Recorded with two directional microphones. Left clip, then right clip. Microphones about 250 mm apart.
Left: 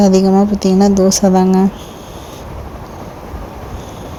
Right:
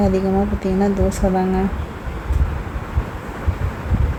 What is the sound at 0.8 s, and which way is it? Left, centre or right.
Speech, centre.